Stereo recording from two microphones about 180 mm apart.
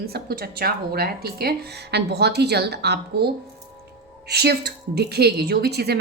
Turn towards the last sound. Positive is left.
turn(degrees=-65)  # may be behind; listen again after turning